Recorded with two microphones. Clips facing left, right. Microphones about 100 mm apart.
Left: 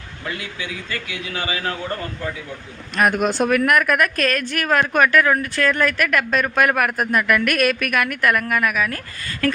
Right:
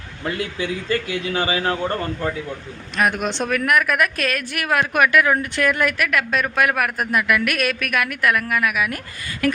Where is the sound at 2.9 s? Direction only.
Centre (ahead or behind); by 9.5 s 15° right (ahead or behind).